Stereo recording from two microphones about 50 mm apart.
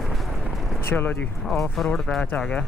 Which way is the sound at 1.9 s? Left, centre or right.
Centre.